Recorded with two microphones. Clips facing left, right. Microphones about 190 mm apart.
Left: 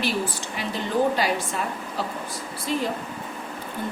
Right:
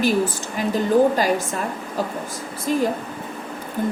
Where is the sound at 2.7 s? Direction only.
45° right (ahead or behind).